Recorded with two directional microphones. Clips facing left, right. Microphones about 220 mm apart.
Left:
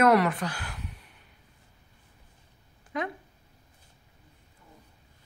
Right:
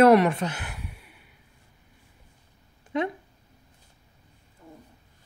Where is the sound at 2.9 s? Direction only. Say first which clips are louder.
Right 6 dB; 25° right (ahead or behind).